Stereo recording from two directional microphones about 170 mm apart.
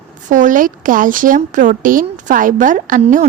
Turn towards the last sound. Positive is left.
turn(degrees=-45)  # may be behind; listen again after turning